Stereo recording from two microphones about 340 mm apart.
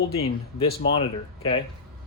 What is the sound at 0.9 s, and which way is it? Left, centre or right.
Speech, centre.